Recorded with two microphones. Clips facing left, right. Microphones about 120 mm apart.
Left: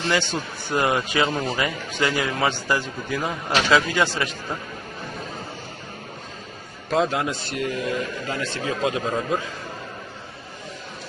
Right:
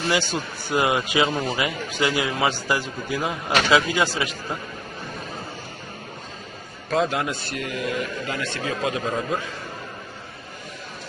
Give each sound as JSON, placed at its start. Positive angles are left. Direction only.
{"t": 0.0, "sound": "a man's voice", "side_deg": -10}
{"t": 6.9, "sound": "a man's voice", "side_deg": 25}
{"t": 8.8, "sound": "a man's voice", "side_deg": 25}